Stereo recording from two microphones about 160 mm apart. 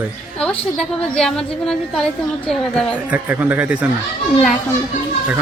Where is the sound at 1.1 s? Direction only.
Centre (ahead or behind).